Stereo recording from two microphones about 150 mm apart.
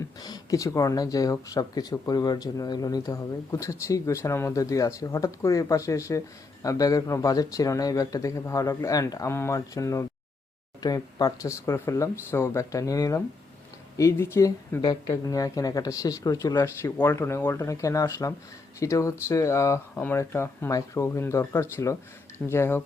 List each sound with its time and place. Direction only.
0.2 s speech: 25° left (ahead or behind)